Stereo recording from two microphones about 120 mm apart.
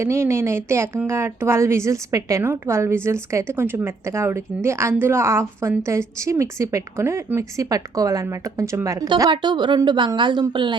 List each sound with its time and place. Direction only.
0.0 s a woman's voice: 20° right (ahead or behind); by 10.8 s 40° right (ahead or behind)